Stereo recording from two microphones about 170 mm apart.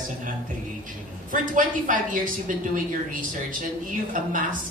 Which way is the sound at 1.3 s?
50° right (ahead or behind).